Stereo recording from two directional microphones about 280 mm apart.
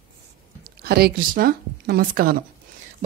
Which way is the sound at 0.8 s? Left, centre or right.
Right.